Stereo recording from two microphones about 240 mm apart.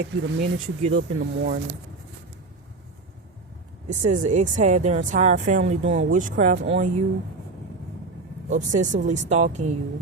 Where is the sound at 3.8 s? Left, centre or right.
Right.